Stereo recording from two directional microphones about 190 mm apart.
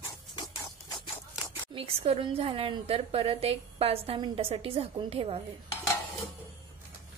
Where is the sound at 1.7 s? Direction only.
30° right (ahead or behind).